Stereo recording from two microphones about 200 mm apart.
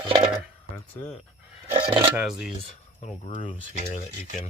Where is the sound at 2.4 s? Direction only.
35° left (ahead or behind).